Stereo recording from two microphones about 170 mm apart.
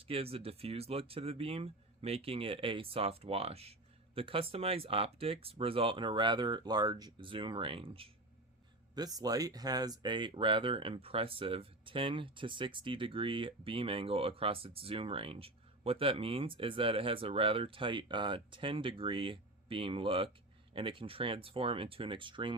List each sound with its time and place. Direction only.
0.0 s speech: 35° right (ahead or behind)